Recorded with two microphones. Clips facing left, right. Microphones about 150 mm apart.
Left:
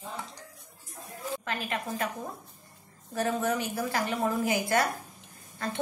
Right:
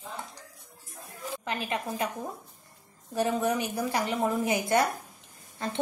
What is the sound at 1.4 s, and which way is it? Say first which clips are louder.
Speech: right 4 dB; 20° right (ahead or behind).